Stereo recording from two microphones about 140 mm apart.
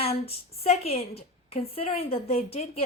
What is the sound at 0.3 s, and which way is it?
A woman's voice, 45° left (ahead or behind).